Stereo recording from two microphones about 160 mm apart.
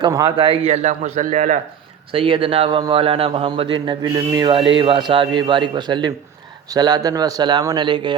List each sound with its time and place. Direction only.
0.0 s speech: 20° right (ahead or behind)
0.3 s a man's voice: 35° right (ahead or behind); by 1.5 s 55° right (ahead or behind)
2.1 s a man's voice: 35° right (ahead or behind)